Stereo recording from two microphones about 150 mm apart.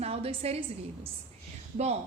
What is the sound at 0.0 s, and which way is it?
Speech, 40° right (ahead or behind).